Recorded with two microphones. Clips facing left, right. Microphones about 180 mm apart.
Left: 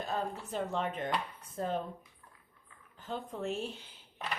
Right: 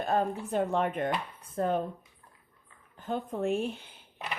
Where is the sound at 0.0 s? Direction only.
60° right (ahead or behind).